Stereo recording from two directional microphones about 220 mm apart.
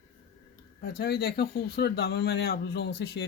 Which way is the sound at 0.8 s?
45° left (ahead or behind).